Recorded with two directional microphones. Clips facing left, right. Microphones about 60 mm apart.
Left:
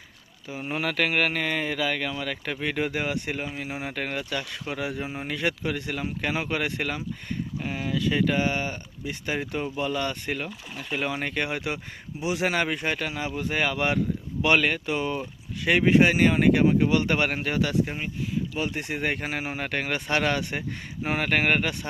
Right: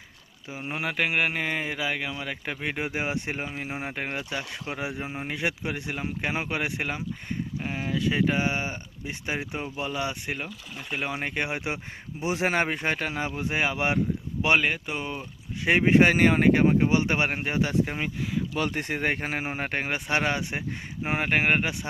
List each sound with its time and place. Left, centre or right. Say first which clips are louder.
0.4 s speech: left 2 dB; centre
7.6 s speech: left 1 dB; right
12.2 s speech: even; right; by 15.2 s centre
15.6 s speech: even; right
18.7 s speech: right 1 dB; right
19.9 s speech: left 2 dB; centre